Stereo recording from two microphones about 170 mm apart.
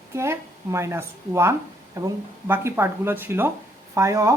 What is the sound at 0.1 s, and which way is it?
Speech, 15° right (ahead or behind).